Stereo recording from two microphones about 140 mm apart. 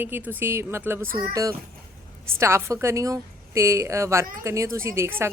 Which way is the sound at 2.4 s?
20° right (ahead or behind).